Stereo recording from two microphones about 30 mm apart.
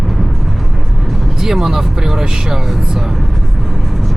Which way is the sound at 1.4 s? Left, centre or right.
Centre.